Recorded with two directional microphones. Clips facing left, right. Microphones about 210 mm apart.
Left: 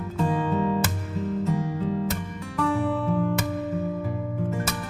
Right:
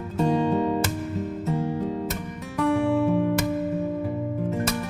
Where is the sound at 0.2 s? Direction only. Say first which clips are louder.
Right 3 dB; 25° right (ahead or behind).